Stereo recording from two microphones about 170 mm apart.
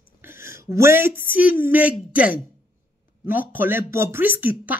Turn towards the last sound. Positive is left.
turn(degrees=-10)  # may be behind; listen again after turning